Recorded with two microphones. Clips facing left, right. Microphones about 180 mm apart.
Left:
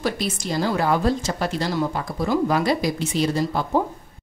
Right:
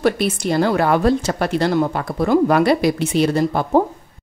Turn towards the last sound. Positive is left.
turn(degrees=-60)  # may be behind; listen again after turning